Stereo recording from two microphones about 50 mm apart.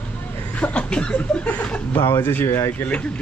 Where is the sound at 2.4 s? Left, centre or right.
Left.